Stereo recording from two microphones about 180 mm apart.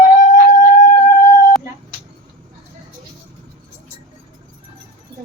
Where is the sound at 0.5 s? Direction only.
45° left (ahead or behind).